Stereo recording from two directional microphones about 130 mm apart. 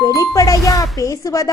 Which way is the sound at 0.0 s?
25° left (ahead or behind).